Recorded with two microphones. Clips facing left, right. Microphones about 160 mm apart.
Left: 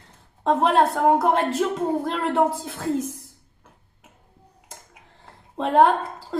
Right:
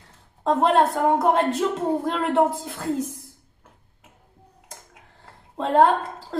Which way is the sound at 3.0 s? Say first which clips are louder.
Right 1 dB; 90° left.